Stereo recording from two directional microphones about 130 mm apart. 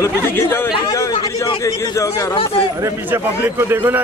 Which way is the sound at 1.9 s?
25° left (ahead or behind).